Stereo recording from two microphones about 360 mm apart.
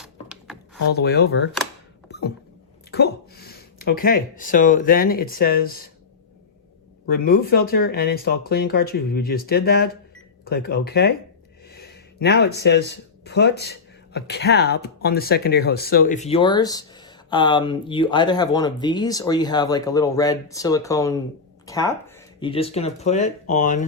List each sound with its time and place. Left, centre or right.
0.0 s a sound: centre
0.8 s speech: left
2.9 s speech: left
7.1 s speech: left